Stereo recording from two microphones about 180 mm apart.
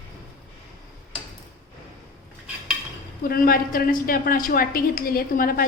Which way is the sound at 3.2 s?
55° left (ahead or behind).